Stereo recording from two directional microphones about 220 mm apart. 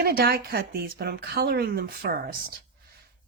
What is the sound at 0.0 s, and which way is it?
Speech, 45° right (ahead or behind).